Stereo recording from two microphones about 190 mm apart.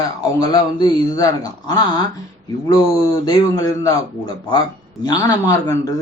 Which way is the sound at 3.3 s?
20° left (ahead or behind).